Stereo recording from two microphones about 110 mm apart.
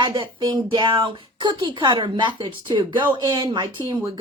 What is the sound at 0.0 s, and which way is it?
Speech, 40° right (ahead or behind).